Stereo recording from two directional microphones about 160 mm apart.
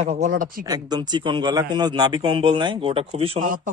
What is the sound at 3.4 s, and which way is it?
Speech, 60° right (ahead or behind).